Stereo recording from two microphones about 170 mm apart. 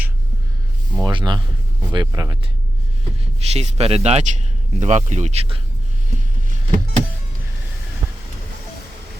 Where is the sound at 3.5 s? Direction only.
40° right (ahead or behind).